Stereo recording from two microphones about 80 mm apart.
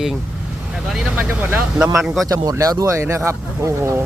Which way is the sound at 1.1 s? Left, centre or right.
Right.